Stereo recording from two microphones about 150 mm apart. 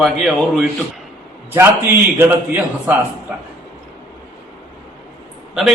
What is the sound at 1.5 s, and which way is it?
A man's voice, 15° right (ahead or behind).